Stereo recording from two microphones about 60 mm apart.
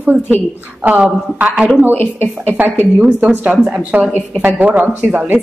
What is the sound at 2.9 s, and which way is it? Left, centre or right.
Speech, right.